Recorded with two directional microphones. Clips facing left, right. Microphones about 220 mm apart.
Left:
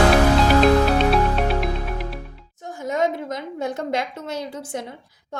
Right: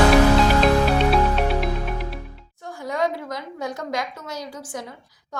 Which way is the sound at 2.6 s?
20° left (ahead or behind).